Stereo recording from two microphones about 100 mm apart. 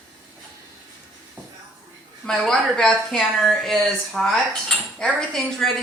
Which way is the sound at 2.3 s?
5° left (ahead or behind).